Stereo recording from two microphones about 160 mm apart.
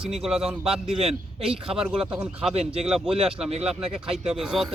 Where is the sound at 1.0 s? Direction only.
35° right (ahead or behind).